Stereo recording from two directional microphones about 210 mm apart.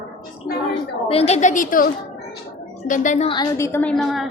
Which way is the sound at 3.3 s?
15° left (ahead or behind).